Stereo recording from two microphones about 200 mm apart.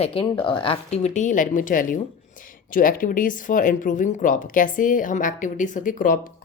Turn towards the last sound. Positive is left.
turn(degrees=40)  # may be behind; listen again after turning